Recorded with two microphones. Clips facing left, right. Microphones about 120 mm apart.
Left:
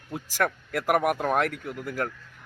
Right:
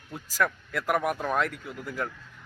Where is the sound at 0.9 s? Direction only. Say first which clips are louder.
Left 3 dB; 55° left (ahead or behind).